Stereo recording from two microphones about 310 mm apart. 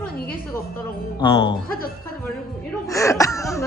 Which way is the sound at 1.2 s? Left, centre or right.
Centre.